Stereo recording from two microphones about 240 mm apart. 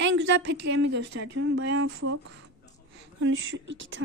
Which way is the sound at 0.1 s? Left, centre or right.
Right.